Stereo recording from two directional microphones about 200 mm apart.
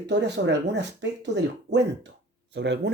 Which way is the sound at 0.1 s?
60° right (ahead or behind).